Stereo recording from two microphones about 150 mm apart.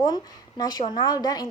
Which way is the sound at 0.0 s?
25° left (ahead or behind).